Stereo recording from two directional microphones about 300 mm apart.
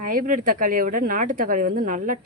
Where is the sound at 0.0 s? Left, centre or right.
Right.